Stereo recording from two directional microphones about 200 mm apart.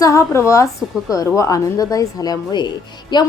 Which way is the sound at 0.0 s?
15° left (ahead or behind).